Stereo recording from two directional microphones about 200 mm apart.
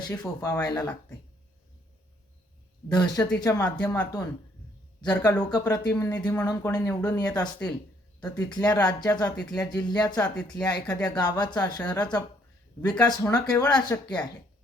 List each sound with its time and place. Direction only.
0.1 s speech: 15° left (ahead or behind)
2.9 s speech: 20° left (ahead or behind)